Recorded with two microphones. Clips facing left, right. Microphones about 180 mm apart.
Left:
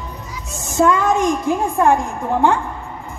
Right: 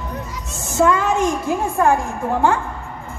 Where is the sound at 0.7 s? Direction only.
15° left (ahead or behind).